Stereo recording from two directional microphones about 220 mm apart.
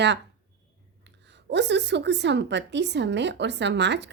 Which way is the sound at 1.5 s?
50° right (ahead or behind).